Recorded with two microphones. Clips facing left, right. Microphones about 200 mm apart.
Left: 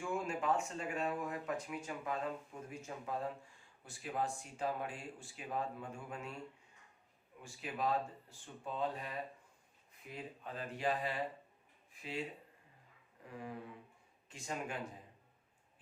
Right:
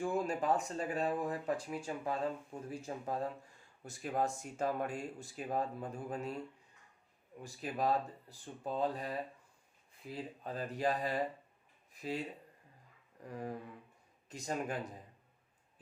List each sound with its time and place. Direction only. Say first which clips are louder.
0.0 s speech: right 4 dB; 35° right (ahead or behind)
7.4 s speech: right 3 dB; 40° right (ahead or behind)
13.2 s speech: right 4 dB; 40° right (ahead or behind)